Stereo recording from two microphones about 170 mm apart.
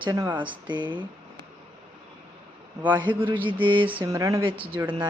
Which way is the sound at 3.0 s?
30° right (ahead or behind).